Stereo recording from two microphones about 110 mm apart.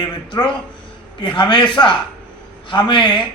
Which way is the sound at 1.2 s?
45° left (ahead or behind).